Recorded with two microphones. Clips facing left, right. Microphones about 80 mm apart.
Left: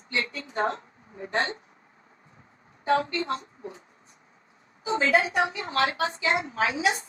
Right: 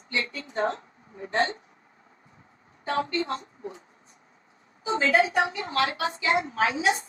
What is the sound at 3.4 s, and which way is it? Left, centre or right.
Speech, right.